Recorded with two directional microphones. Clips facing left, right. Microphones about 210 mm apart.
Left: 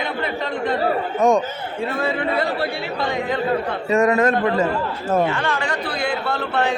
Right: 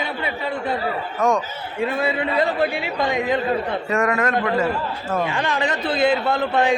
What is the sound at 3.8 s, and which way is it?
Speech, 25° left (ahead or behind).